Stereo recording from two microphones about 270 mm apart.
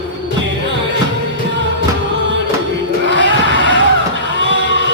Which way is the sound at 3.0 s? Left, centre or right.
Right.